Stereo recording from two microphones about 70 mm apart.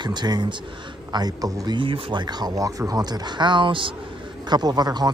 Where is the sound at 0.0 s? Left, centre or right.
Right.